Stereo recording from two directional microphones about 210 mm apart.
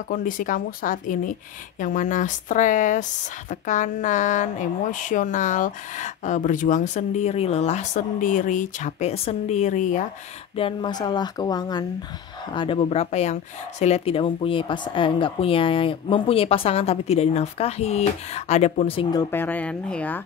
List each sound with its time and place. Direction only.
0.1 s speech: 40° left (ahead or behind)
10.5 s speech: 25° left (ahead or behind); by 20.2 s 5° left (ahead or behind)